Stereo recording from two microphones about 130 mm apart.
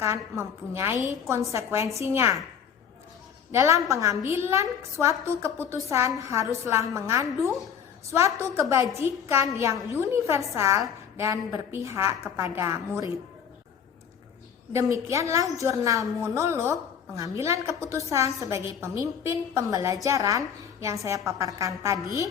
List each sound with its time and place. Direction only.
0.0 s a woman's voice: 20° right (ahead or behind)
3.5 s a woman's voice: 20° right (ahead or behind)
14.9 s a woman's voice: 25° right (ahead or behind)